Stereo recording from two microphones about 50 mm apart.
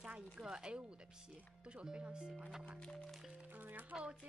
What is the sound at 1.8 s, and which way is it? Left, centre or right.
Speech, centre.